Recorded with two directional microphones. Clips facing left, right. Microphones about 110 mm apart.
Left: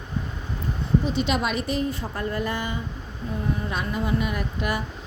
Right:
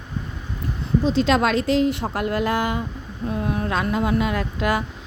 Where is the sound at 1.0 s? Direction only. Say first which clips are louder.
Right 6 dB; 90° right.